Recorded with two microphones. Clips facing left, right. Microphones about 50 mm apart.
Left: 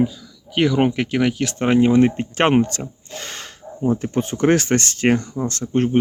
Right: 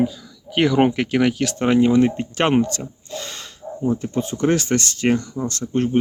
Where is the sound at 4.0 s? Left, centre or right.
Left.